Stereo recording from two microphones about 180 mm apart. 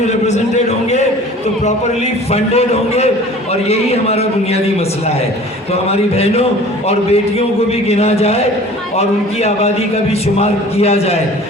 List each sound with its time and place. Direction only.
0.3 s a sound: 40° left (ahead or behind)
2.3 s a man's voice: 35° left (ahead or behind)
5.7 s a man's voice: 35° left (ahead or behind)